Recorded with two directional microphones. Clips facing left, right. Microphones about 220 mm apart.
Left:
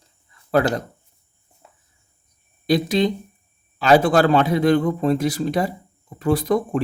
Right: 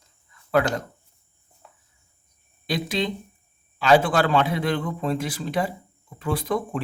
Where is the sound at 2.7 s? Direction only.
40° left (ahead or behind).